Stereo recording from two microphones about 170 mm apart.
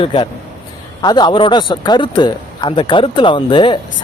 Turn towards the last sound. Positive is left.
turn(degrees=30)  # may be behind; listen again after turning